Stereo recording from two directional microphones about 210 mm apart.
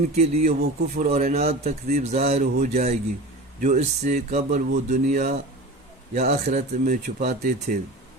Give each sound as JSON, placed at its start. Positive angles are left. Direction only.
{"t": 0.0, "sound": "speech", "side_deg": -35}